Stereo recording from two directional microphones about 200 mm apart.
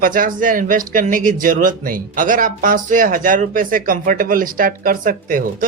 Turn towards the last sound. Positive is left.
turn(degrees=-45)  # may be behind; listen again after turning